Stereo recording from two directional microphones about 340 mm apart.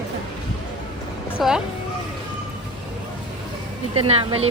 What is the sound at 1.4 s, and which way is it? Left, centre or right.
Speech, centre.